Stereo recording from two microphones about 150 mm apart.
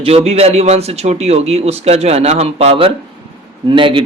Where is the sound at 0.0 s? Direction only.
40° right (ahead or behind).